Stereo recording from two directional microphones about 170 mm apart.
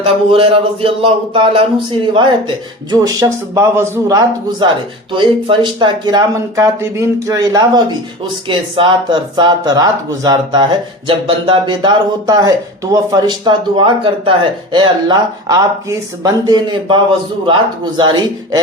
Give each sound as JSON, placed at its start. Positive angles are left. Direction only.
{"t": 0.0, "sound": "speech", "side_deg": -30}
{"t": 2.9, "sound": "speech", "side_deg": -20}